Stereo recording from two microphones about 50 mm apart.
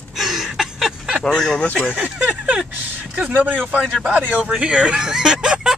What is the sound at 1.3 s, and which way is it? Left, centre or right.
Speech, centre.